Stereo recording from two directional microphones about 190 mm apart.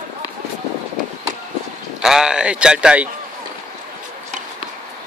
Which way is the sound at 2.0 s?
5° right (ahead or behind).